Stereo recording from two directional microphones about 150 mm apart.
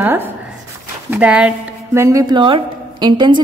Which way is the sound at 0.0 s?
15° right (ahead or behind).